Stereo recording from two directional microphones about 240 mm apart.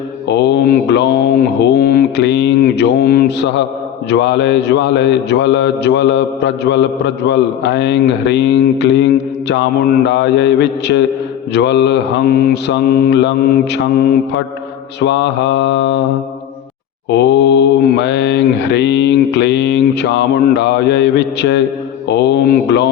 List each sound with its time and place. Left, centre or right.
0.3 s mantra: left
4.1 s a man's voice: left
17.1 s a man's voice: left